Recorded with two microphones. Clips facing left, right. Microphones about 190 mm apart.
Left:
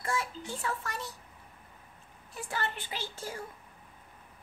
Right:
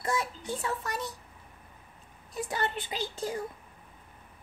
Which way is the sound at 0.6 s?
20° right (ahead or behind).